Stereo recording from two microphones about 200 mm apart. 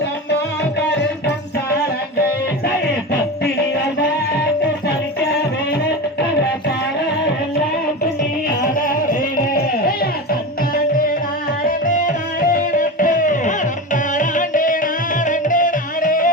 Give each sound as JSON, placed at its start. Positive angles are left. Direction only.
{"t": 4.9, "sound": "music", "side_deg": 55}
{"t": 8.6, "sound": "a sound", "side_deg": 45}
{"t": 11.6, "sound": "music", "side_deg": 45}